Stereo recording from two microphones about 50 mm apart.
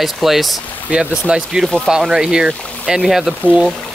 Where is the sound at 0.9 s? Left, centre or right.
Centre.